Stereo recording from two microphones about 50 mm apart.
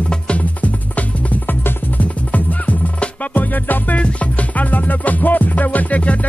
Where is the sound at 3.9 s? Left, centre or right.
Left.